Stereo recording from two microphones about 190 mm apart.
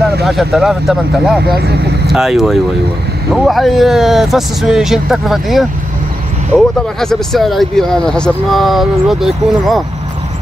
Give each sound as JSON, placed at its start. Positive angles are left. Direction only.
{"t": 0.2, "sound": "speech", "side_deg": 0}
{"t": 1.5, "sound": "speech", "side_deg": -55}
{"t": 2.1, "sound": "speech", "side_deg": 0}
{"t": 7.0, "sound": "speech", "side_deg": 0}